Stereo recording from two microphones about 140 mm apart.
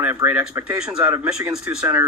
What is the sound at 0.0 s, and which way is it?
Speech, 15° right (ahead or behind).